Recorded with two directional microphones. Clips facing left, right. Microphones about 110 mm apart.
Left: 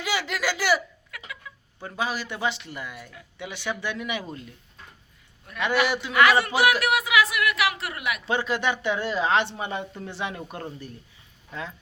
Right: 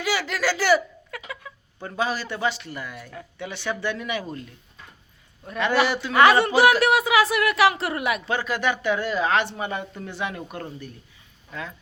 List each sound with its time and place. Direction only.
0.0 s a man's voice: 20° left (ahead or behind)
1.1 s a sound: 30° right (ahead or behind)
1.8 s a man's voice: 10° left (ahead or behind)
5.5 s a man's voice: 30° right (ahead or behind)
6.1 s a sound: 30° right (ahead or behind)
6.6 s a man's voice: 30° right (ahead or behind)
8.3 s speech: 25° left (ahead or behind)